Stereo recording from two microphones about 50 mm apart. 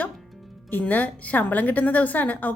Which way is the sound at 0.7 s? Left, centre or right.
Left.